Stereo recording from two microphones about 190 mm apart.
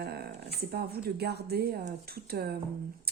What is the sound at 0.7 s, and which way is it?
Speech, 55° right (ahead or behind).